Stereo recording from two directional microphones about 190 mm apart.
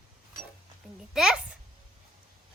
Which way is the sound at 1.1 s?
5° right (ahead or behind).